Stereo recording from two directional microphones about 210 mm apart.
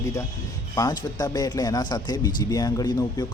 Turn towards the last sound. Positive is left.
turn(degrees=20)  # may be behind; listen again after turning